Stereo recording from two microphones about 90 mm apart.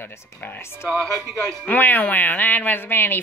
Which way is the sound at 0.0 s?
25° left (ahead or behind).